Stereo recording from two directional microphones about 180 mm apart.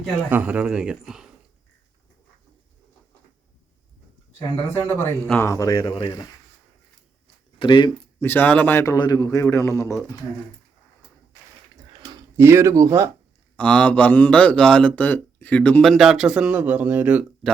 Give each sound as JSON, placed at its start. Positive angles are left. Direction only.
{"t": 0.0, "sound": "a man's voice", "side_deg": -10}
{"t": 5.4, "sound": "speech", "side_deg": 15}
{"t": 7.6, "sound": "speech", "side_deg": 25}
{"t": 8.2, "sound": "a man's voice", "side_deg": 10}
{"t": 11.9, "sound": "a sound", "side_deg": -20}
{"t": 13.6, "sound": "a man's voice", "side_deg": 5}